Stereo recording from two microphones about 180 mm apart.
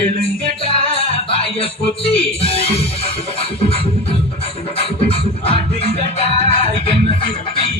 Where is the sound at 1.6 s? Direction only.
30° left (ahead or behind).